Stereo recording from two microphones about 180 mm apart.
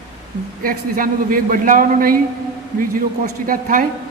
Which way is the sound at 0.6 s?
50° right (ahead or behind).